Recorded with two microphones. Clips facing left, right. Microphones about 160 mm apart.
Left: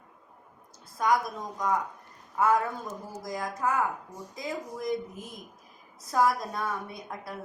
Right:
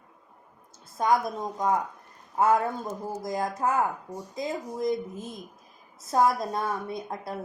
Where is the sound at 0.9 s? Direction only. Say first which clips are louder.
Right 2 dB; 25° right (ahead or behind).